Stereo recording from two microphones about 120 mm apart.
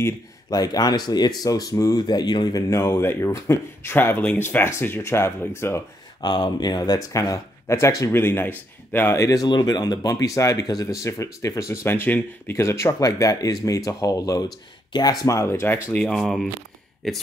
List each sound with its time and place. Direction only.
0.0 s speech: 35° left (ahead or behind)
6.2 s speech: 40° left (ahead or behind); by 16.0 s 20° left (ahead or behind)
16.0 s speech: 5° left (ahead or behind)